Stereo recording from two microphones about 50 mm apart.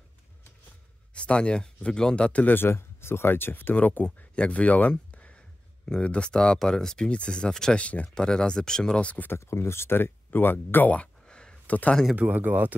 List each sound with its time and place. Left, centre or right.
1.1 s speech: left
2.4 s speech: left
2.7 s speech: left
3.7 s speech: left
5.1 s a sound: left
5.9 s speech: left
8.1 s speech: centre
9.0 s speech: left
9.4 s speech: left
11.2 s a sound: centre
11.6 s a sound: left
12.2 s speech: right